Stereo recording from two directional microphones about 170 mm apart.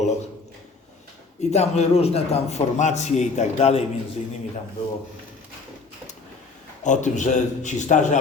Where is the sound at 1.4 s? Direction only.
40° left (ahead or behind).